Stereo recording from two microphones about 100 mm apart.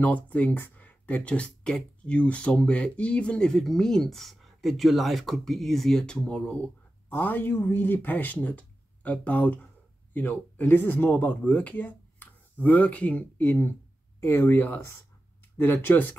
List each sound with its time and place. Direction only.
0.0 s speech: 15° left (ahead or behind)